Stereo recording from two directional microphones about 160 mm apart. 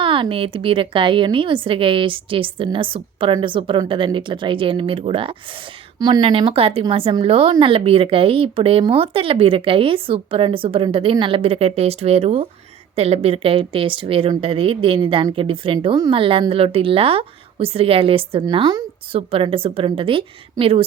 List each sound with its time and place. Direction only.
0.0 s a woman's voice: 30° right (ahead or behind)